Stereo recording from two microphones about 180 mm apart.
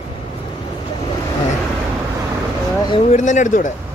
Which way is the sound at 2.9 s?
40° left (ahead or behind).